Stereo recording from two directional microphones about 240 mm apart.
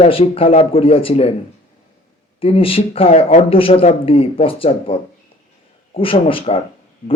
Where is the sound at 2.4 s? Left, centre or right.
Left.